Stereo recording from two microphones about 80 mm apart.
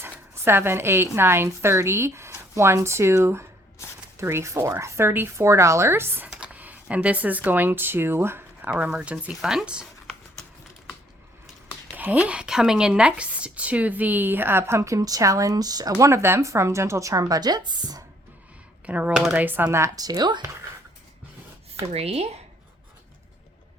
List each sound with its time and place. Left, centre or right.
0.0 s dog: right
1.1 s speech: right
6.3 s speech: centre
8.7 s speech: centre
9.3 s speech: centre
11.9 s speech: centre; by 15.9 s right
16.0 s speech: right
18.9 s speech: centre
20.0 s speech: right